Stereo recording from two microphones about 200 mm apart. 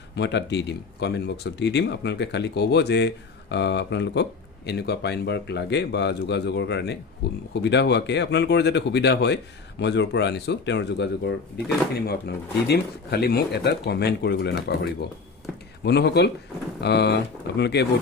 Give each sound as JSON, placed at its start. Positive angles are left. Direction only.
{"t": 0.1, "sound": "speech", "side_deg": 60}
{"t": 15.8, "sound": "speech", "side_deg": 55}